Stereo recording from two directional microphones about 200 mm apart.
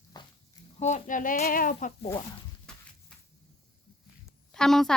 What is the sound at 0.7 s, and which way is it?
Speech, 35° left (ahead or behind).